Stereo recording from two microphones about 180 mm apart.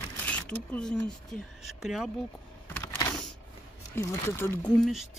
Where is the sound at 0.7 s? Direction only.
5° left (ahead or behind).